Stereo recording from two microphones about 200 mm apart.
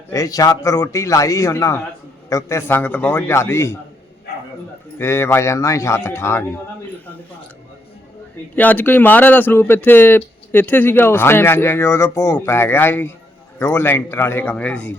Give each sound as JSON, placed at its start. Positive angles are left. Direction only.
{"t": 0.1, "sound": "speech", "side_deg": 20}
{"t": 4.9, "sound": "speech", "side_deg": 15}
{"t": 8.5, "sound": "speech", "side_deg": 10}